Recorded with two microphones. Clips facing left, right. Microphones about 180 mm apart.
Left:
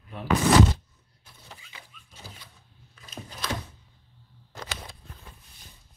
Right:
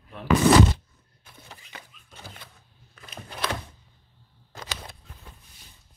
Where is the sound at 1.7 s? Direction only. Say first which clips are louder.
Right 4 dB; 55° right (ahead or behind).